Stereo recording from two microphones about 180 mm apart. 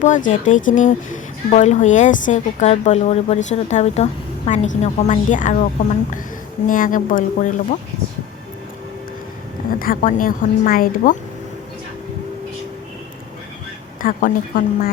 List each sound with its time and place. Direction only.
0.0 s speech: 45° left (ahead or behind)
6.7 s speech: 50° left (ahead or behind)
9.7 s speech: 50° left (ahead or behind)
14.0 s speech: 50° left (ahead or behind)